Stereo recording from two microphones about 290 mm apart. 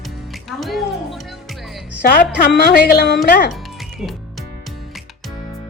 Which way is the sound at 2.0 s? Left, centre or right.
Left.